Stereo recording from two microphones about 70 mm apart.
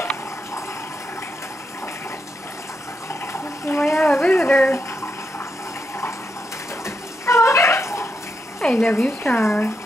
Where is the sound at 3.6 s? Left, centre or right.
Left.